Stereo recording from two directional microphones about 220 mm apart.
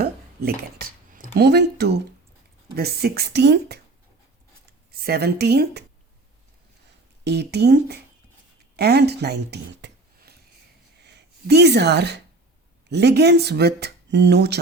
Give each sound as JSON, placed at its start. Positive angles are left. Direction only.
{"t": 0.0, "sound": "a sound", "side_deg": -40}
{"t": 2.7, "sound": "speech", "side_deg": -45}
{"t": 4.9, "sound": "speech", "side_deg": -45}
{"t": 7.3, "sound": "speech", "side_deg": -50}
{"t": 8.7, "sound": "a sound", "side_deg": -45}
{"t": 11.0, "sound": "speech", "side_deg": -50}